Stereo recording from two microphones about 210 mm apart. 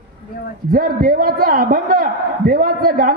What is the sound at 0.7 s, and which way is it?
A man's voice, 45° right (ahead or behind).